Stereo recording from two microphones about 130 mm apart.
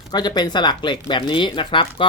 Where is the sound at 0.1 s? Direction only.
35° left (ahead or behind).